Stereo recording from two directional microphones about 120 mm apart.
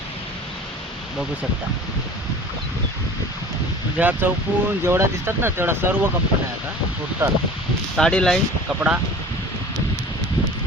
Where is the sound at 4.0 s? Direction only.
15° right (ahead or behind).